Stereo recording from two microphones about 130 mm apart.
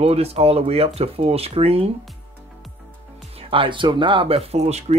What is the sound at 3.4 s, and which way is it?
Speech, 45° right (ahead or behind).